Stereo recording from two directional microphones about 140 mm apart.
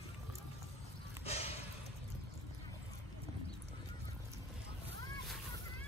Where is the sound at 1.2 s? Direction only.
45° left (ahead or behind).